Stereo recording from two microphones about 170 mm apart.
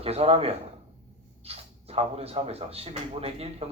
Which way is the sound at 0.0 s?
35° right (ahead or behind).